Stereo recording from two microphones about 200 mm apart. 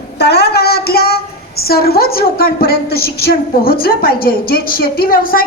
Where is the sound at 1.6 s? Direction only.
50° left (ahead or behind).